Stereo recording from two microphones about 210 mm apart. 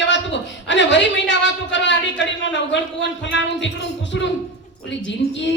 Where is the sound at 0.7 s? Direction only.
60° left (ahead or behind).